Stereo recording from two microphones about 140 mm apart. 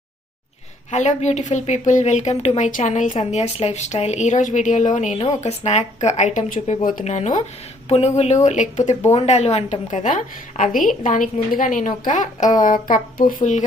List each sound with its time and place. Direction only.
0.9 s a woman's voice: 60° left (ahead or behind)